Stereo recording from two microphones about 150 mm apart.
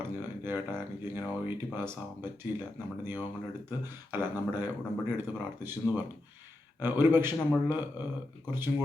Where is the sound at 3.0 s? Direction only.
15° right (ahead or behind).